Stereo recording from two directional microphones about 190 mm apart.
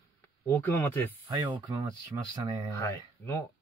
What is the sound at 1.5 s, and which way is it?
Speech, 20° right (ahead or behind).